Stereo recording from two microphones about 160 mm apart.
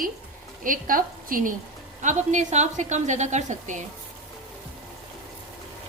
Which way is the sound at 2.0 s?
50° right (ahead or behind).